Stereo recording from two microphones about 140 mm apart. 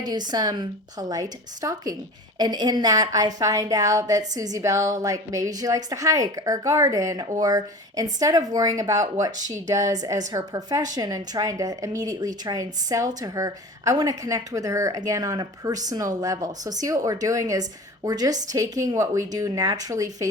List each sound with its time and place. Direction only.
0.0 s a woman's voice: 30° right (ahead or behind)